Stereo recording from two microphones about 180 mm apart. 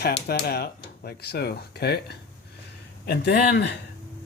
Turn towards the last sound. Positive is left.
turn(degrees=65)  # may be behind; listen again after turning